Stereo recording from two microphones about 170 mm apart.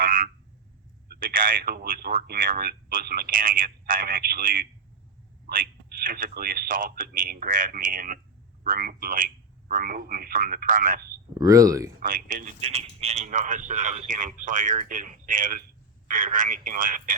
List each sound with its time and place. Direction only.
0.0 s frog: 50° right (ahead or behind)
1.0 s speech: 55° right (ahead or behind)
11.3 s speech: 20° right (ahead or behind)
11.9 s a man's voice: 55° right (ahead or behind)
12.5 s a man's voice: 40° right (ahead or behind)